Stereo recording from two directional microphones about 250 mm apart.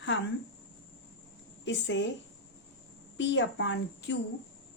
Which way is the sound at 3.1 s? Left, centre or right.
Left.